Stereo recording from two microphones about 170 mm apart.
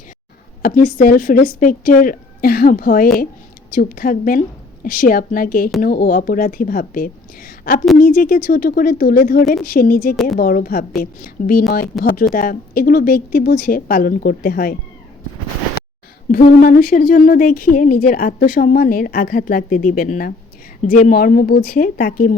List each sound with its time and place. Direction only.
0.6 s speech: 55° left (ahead or behind)
16.3 s speech: 55° left (ahead or behind)